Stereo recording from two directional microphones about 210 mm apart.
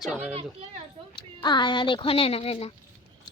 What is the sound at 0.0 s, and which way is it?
Speech, 5° right (ahead or behind).